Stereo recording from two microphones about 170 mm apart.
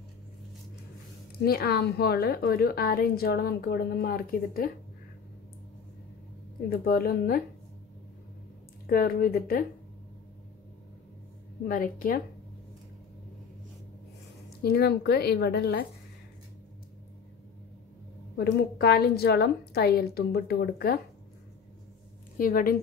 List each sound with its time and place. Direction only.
1.4 s a woman's voice: 65° left (ahead or behind)
6.7 s a woman's voice: 60° left (ahead or behind)
8.8 s a woman's voice: 60° left (ahead or behind)
11.6 s a woman's voice: 55° left (ahead or behind)
14.6 s a woman's voice: 70° left (ahead or behind)
18.3 s a woman's voice: 70° left (ahead or behind)
22.4 s a woman's voice: 60° left (ahead or behind)